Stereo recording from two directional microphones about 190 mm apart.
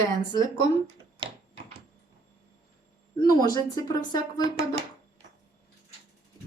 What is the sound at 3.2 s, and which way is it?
Speech, 20° left (ahead or behind).